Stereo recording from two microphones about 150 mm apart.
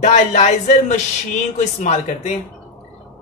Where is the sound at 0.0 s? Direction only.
50° left (ahead or behind).